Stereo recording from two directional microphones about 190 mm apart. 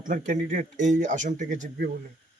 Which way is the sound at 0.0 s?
45° right (ahead or behind).